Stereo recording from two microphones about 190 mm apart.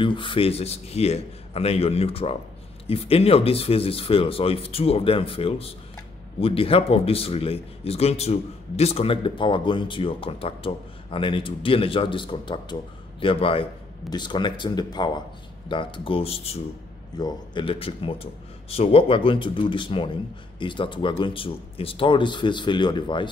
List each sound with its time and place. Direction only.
0.0 s speech: 25° left (ahead or behind)